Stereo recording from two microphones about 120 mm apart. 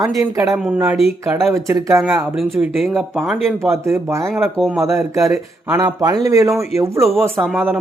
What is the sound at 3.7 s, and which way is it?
Speech, 20° right (ahead or behind).